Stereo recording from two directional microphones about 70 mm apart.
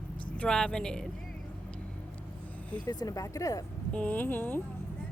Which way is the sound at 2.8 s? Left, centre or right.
Left.